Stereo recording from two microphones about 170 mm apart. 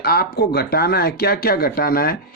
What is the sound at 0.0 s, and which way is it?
Speech, 65° left (ahead or behind).